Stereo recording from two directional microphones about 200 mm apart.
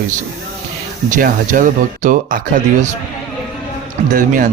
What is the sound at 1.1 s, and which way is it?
Speech, 40° right (ahead or behind).